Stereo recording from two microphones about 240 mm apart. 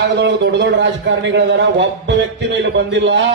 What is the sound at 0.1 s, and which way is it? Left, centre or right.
A man's voice, right.